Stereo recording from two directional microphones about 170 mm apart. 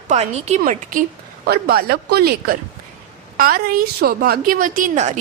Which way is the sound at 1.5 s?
65° right (ahead or behind).